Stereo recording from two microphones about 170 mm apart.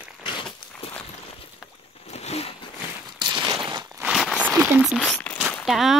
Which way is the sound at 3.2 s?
25° right (ahead or behind).